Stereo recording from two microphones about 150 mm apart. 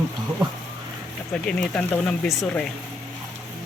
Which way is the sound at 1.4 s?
5° left (ahead or behind).